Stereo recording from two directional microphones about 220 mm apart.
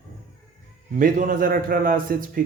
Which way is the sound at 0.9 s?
40° right (ahead or behind).